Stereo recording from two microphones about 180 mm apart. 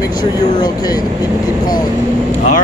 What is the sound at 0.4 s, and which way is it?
Speech, 25° left (ahead or behind).